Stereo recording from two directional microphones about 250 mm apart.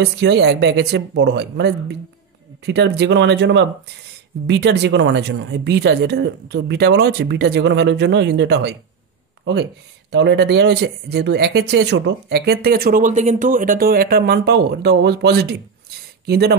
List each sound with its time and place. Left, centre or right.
0.0 s speech: right